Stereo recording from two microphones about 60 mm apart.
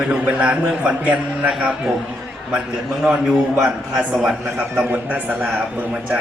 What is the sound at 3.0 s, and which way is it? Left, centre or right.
A man's voice, centre.